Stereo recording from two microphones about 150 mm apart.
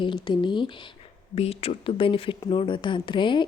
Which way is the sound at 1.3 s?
40° left (ahead or behind).